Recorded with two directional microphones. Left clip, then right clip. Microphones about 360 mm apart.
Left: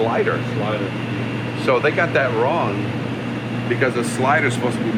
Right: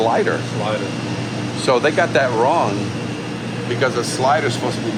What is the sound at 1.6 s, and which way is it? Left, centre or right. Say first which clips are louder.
Speech: right 2 dB; right.